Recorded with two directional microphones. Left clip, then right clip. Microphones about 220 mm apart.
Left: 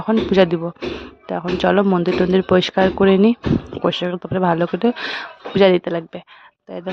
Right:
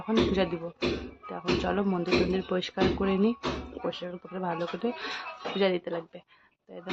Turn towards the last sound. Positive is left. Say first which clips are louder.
# left 12 dB
turn(degrees=45)  # may be behind; listen again after turning